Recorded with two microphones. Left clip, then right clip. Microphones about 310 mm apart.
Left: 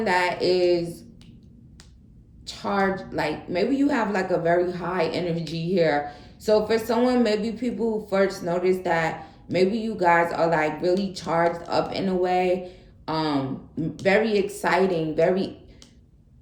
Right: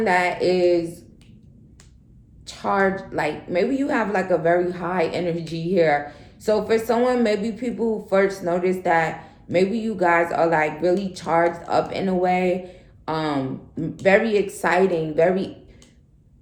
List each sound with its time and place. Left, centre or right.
0.0 s a woman's voice: centre
2.5 s a woman's voice: centre